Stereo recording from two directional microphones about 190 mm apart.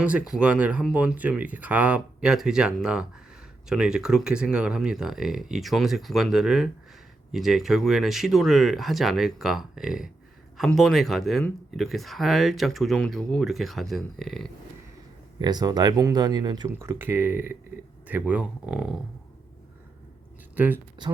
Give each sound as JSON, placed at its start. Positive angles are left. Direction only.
{"t": 0.0, "sound": "speech", "side_deg": -5}
{"t": 15.4, "sound": "speech", "side_deg": -20}
{"t": 20.6, "sound": "speech", "side_deg": -10}